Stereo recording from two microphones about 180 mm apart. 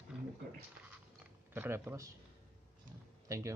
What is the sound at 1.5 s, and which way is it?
Speech, 15° right (ahead or behind).